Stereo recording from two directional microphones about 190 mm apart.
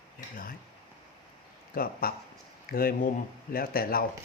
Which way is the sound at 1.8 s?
50° left (ahead or behind).